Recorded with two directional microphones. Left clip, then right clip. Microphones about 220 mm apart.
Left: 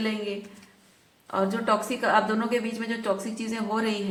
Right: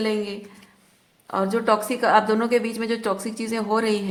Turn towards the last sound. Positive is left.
turn(degrees=-40)  # may be behind; listen again after turning